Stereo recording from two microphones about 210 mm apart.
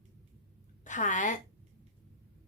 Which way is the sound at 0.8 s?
35° left (ahead or behind).